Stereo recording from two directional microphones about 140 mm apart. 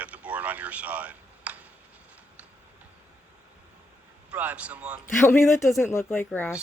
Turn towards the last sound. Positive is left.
turn(degrees=15)  # may be behind; listen again after turning